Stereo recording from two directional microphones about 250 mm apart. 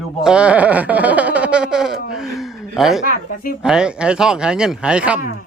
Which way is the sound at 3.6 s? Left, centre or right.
Centre.